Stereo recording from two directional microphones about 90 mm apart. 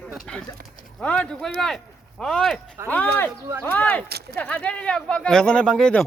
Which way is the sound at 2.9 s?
20° left (ahead or behind).